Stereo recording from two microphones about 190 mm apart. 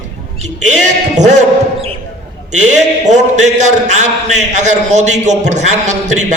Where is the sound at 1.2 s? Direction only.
40° right (ahead or behind).